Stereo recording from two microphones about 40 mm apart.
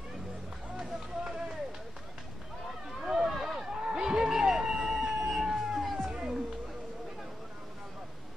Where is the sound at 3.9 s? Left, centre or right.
Centre.